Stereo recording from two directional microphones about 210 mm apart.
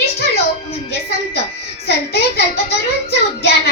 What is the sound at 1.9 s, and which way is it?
A child's voice, 50° left (ahead or behind).